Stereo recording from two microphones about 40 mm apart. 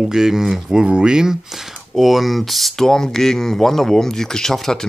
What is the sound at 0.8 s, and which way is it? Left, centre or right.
Speech, right.